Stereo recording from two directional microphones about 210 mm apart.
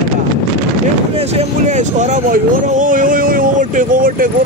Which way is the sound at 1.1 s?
30° right (ahead or behind).